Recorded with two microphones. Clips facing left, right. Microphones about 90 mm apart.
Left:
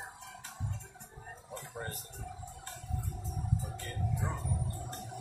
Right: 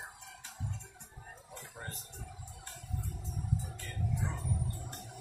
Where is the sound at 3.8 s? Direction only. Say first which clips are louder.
Left 1 dB; 40° left (ahead or behind).